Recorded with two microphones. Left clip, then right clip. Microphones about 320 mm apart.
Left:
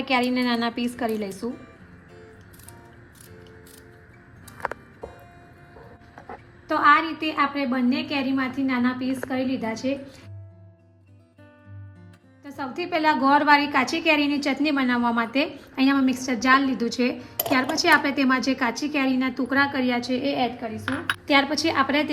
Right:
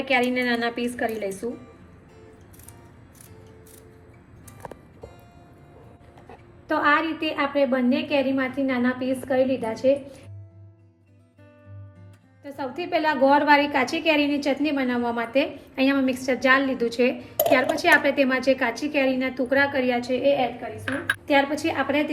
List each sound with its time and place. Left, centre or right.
0.0 s a woman's voice: centre
6.7 s a woman's voice: centre
12.4 s a woman's voice: centre